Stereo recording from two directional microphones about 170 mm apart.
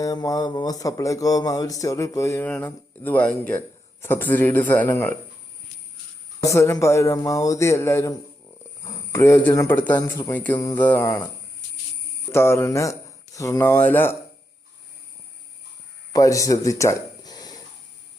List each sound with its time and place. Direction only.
0.0 s a man's voice: 20° left (ahead or behind)
6.4 s a man's voice: 15° left (ahead or behind)
12.3 s speech: 15° left (ahead or behind)
16.1 s speech: 20° left (ahead or behind)